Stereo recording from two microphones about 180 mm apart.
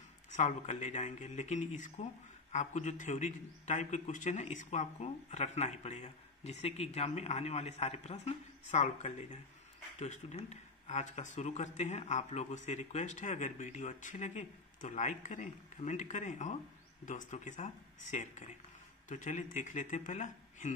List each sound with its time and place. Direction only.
0.3 s a man's voice: 40° left (ahead or behind)